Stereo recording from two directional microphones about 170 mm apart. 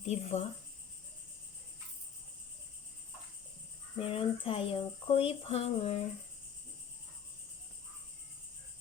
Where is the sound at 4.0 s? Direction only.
30° left (ahead or behind).